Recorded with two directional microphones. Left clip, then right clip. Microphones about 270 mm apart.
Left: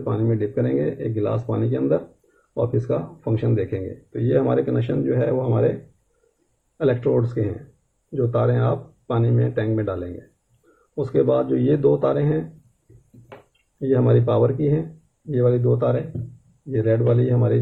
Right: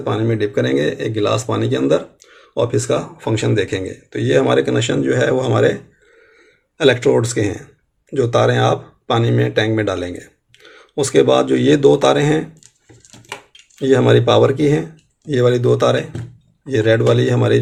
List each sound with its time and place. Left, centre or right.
0.0 s speech: centre
6.7 s speech: right
13.9 s speech: right